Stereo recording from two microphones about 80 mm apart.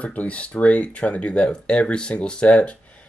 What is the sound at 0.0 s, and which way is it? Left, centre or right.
Speech, centre.